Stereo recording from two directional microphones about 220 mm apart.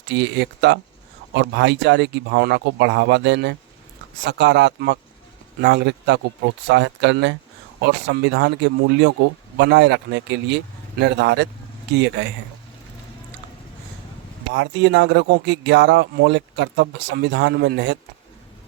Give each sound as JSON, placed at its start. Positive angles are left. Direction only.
{"t": 0.1, "sound": "speech", "side_deg": -55}
{"t": 14.5, "sound": "speech", "side_deg": -55}